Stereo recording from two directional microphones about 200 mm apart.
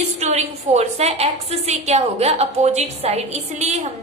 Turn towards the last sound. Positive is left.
turn(degrees=-35)  # may be behind; listen again after turning